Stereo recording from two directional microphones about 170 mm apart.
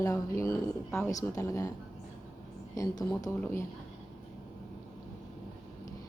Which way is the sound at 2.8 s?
20° left (ahead or behind).